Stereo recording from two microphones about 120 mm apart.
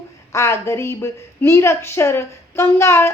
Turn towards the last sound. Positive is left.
turn(degrees=20)  # may be behind; listen again after turning